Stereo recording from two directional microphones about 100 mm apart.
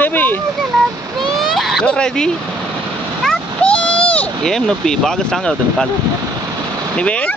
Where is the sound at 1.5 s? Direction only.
Centre (ahead or behind).